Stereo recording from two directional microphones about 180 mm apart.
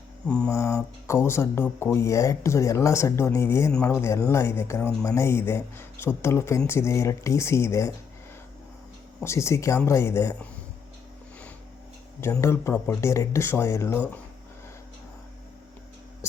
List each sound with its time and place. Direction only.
0.3 s mantra: 5° left (ahead or behind)
0.5 s speech: 15° left (ahead or behind)
9.2 s speech: 15° left (ahead or behind)
12.2 s speech: 15° left (ahead or behind)